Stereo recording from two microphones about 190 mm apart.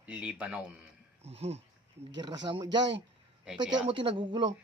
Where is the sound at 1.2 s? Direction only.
35° right (ahead or behind).